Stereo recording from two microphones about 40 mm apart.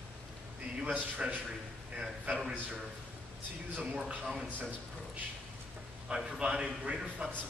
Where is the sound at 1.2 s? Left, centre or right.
Right.